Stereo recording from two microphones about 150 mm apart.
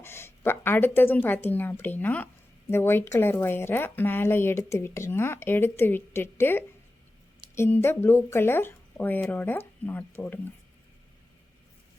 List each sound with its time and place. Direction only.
0.0 s speech: 15° left (ahead or behind)